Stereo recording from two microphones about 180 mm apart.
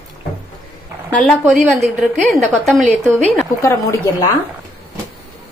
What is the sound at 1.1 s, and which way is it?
A woman's voice, 5° left (ahead or behind).